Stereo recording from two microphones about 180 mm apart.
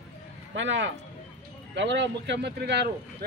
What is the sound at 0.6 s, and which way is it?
Speech, 90° right.